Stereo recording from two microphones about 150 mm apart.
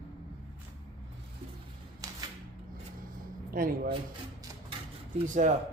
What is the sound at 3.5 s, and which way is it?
Speech, 75° right (ahead or behind).